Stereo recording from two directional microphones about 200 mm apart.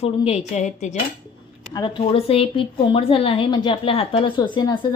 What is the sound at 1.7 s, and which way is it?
A woman's voice, 25° left (ahead or behind).